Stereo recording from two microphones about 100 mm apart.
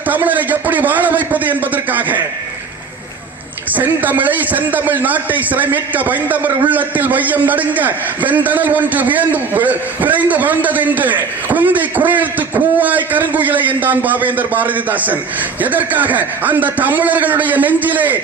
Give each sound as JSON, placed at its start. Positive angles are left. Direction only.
{"t": 0.1, "sound": "a man's voice", "side_deg": -15}
{"t": 3.7, "sound": "a man's voice", "side_deg": -15}